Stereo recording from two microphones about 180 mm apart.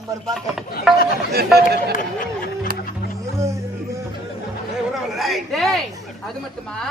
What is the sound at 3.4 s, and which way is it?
Music, 15° right (ahead or behind).